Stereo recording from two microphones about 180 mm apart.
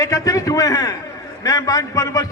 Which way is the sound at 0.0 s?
20° left (ahead or behind).